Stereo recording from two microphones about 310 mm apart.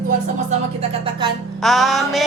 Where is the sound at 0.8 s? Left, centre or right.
Centre.